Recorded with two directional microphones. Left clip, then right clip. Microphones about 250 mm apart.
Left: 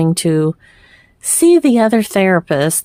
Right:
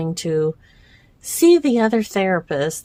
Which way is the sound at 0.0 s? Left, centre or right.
Left.